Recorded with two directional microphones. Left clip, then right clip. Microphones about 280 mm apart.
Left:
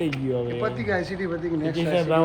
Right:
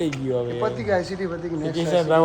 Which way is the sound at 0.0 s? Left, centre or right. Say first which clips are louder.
Right 2 dB; centre.